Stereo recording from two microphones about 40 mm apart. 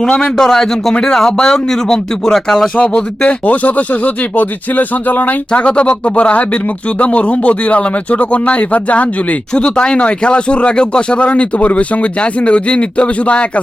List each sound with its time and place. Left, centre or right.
0.3 s a man's voice: centre
2.7 s speech: left
3.4 s speech: left
5.5 s speech: left
9.6 s speech: left